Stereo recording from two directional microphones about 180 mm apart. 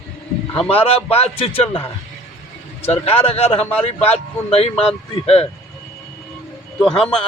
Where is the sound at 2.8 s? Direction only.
35° left (ahead or behind).